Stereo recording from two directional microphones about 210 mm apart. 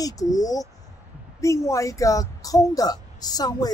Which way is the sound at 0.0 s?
15° left (ahead or behind).